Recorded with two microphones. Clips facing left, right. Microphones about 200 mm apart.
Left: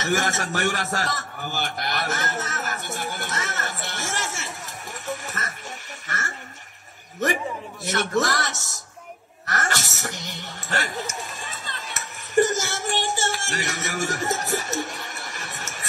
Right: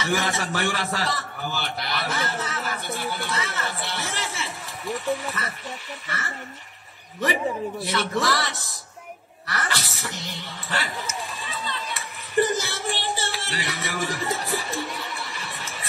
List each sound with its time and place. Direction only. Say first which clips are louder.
0.0 s a man's voice: left 1 dB; 45° left (ahead or behind)